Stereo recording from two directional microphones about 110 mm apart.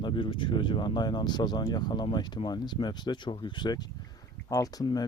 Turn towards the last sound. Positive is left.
turn(degrees=40)  # may be behind; listen again after turning